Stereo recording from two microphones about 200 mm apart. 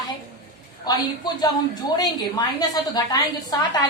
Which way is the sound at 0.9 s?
20° left (ahead or behind).